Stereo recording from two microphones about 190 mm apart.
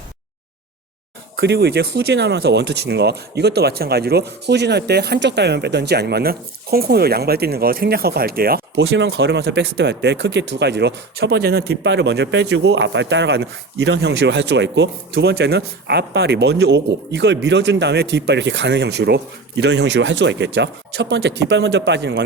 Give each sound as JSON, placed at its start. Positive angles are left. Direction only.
{"t": 1.4, "sound": "speech", "side_deg": -60}